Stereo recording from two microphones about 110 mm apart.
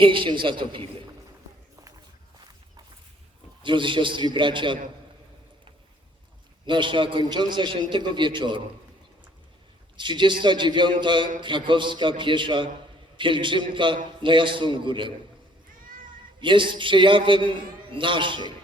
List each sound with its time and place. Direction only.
0.0 s a man's voice: 50° right (ahead or behind)
3.6 s a man's voice: 50° right (ahead or behind)
6.7 s a man's voice: 45° right (ahead or behind)
10.0 s a man's voice: 45° right (ahead or behind)
16.4 s a man's voice: 45° right (ahead or behind)